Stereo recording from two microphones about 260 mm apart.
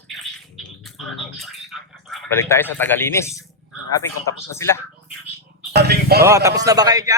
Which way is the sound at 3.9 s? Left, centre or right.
Centre.